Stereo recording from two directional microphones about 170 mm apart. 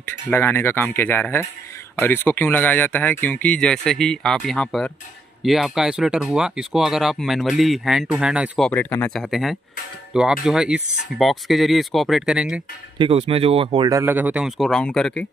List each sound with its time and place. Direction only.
0.0 s speech: 10° left (ahead or behind)
8.7 s speech: 10° left (ahead or behind)
9.2 s speech: centre (ahead or behind)
12.9 s speech: 30° right (ahead or behind)
13.8 s speech: 15° right (ahead or behind); by 15.2 s 5° left (ahead or behind)